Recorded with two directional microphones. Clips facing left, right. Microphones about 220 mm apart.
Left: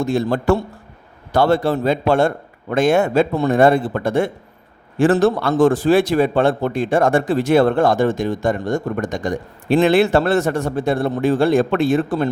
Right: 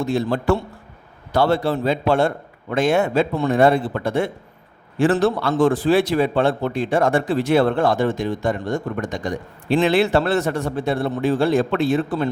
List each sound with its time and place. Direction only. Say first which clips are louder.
0.0 s a man's voice: left 2 dB; 50° left (ahead or behind)